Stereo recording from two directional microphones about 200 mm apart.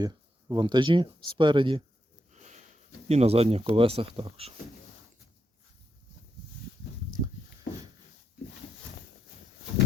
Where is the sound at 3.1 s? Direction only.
30° right (ahead or behind).